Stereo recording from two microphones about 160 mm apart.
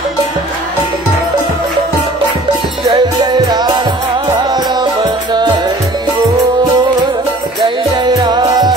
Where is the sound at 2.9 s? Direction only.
25° right (ahead or behind).